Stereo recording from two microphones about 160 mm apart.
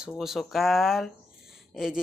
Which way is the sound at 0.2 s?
Centre (ahead or behind).